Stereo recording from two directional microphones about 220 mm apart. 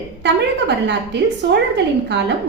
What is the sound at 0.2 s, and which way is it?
Speech, 50° right (ahead or behind).